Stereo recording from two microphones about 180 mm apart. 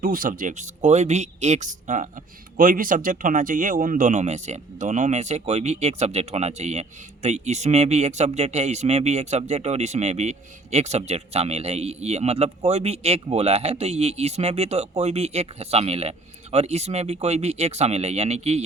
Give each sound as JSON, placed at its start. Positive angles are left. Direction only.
{"t": 0.0, "sound": "speech", "side_deg": -50}